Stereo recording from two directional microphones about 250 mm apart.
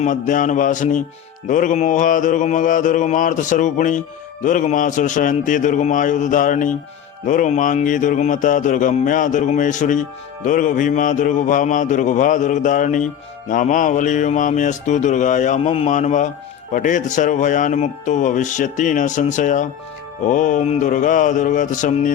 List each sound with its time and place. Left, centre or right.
0.0 s speech: left
13.5 s mantra: left
16.7 s speech: left